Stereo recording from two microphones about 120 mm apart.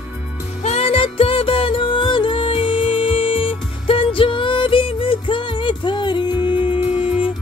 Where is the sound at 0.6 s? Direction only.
60° left (ahead or behind); by 6.3 s 40° left (ahead or behind).